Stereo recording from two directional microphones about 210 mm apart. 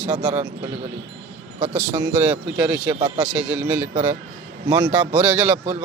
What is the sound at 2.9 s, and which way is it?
Speech, 25° right (ahead or behind).